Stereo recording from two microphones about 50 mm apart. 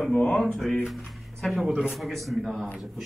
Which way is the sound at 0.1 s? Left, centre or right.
Left.